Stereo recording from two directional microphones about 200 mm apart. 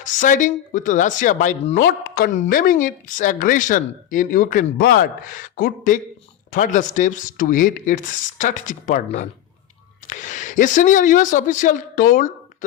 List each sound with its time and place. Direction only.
0.0 s speech: 40° left (ahead or behind)